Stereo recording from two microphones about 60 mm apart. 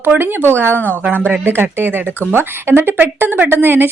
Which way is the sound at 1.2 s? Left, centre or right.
Right.